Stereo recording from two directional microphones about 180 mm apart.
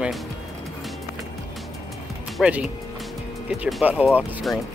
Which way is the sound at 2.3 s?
5° right (ahead or behind).